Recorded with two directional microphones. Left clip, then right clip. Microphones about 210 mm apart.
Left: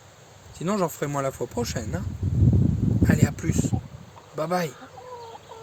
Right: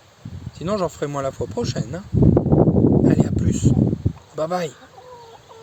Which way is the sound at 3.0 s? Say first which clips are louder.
Right 6 dB; 20° right (ahead or behind).